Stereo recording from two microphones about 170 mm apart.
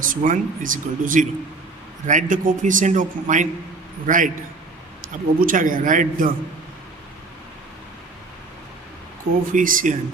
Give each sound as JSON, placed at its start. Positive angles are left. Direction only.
{"t": 0.0, "sound": "speech", "side_deg": -50}
{"t": 5.4, "sound": "speech", "side_deg": -50}
{"t": 9.5, "sound": "speech", "side_deg": -50}